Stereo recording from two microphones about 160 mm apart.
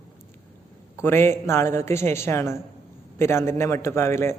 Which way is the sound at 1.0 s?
15° left (ahead or behind).